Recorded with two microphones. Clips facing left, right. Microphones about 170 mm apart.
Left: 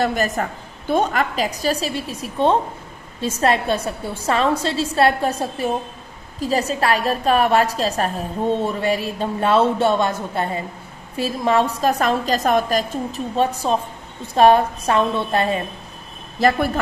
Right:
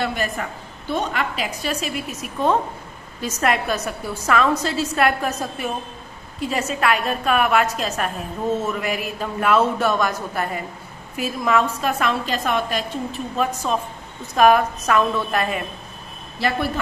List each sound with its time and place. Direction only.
0.0 s a woman's voice: 40° left (ahead or behind)
16.3 s speech: 45° left (ahead or behind)